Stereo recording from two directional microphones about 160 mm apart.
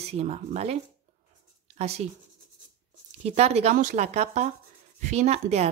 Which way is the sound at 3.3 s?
40° right (ahead or behind).